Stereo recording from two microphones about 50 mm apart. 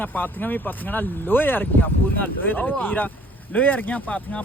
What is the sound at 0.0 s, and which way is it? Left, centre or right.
Speech, left.